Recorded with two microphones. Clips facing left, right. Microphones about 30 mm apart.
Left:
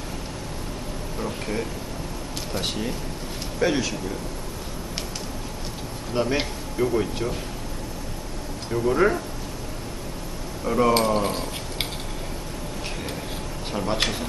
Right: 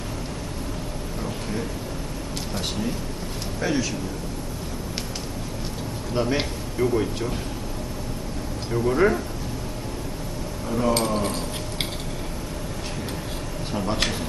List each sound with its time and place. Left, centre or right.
3.6 s a man's voice: centre
6.1 s speech: centre
8.7 s speech: centre
10.7 s speech: left
10.9 s a sound: centre
13.7 s speech: centre